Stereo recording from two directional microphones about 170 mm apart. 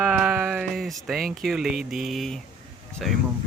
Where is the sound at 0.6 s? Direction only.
Centre (ahead or behind).